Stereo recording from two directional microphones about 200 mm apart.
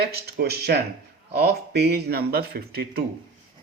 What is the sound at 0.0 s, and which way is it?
Speech, 50° right (ahead or behind).